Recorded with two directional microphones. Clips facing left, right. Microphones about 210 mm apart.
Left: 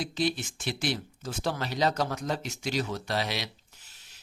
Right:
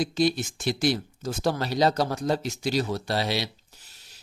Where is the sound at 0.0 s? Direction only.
40° right (ahead or behind).